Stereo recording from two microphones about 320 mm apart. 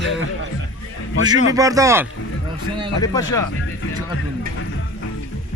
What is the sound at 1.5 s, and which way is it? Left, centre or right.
Speech, centre.